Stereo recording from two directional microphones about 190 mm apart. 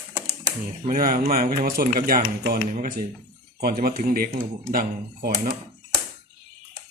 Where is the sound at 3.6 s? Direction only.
50° right (ahead or behind).